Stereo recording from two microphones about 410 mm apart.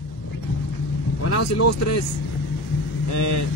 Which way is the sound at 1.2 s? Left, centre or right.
Left.